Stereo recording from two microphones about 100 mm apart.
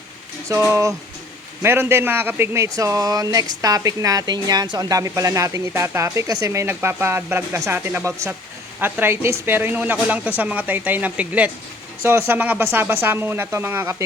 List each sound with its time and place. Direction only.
0.5 s speech: 30° right (ahead or behind)
2.6 s a woman's voice: 35° right (ahead or behind)